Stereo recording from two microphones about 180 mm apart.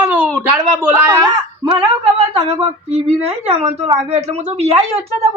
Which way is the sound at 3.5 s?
30° right (ahead or behind).